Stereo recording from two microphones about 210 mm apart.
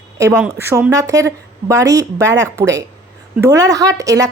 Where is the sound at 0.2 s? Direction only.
10° right (ahead or behind).